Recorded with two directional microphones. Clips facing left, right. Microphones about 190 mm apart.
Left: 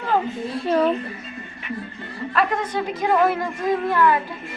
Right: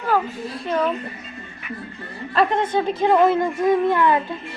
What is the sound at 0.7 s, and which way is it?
Speech, 35° left (ahead or behind).